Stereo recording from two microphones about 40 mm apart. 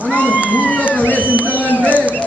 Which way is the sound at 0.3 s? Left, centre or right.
Right.